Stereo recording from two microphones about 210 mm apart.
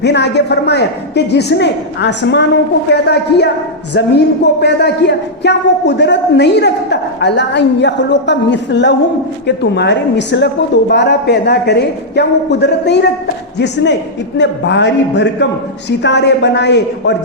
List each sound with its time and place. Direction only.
0.0 s speech: 55° left (ahead or behind)
4.6 s a man's voice: 55° left (ahead or behind)
14.3 s a man's voice: 55° left (ahead or behind)